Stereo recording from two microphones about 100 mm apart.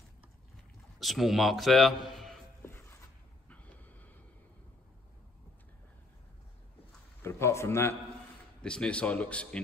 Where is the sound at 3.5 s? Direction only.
15° left (ahead or behind).